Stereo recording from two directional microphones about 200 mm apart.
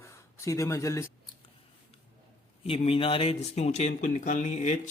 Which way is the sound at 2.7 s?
30° left (ahead or behind).